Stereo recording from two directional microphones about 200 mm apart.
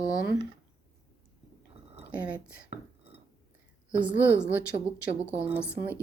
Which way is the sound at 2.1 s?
5° right (ahead or behind).